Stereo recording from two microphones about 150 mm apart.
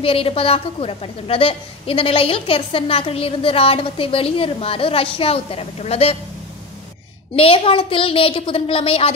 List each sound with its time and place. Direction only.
0.0 s a woman's voice: 40° left (ahead or behind)
7.3 s a woman's voice: 40° left (ahead or behind)